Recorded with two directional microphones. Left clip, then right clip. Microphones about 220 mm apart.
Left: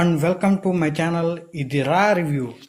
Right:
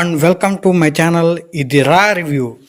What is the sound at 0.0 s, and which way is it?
Speech, 50° right (ahead or behind).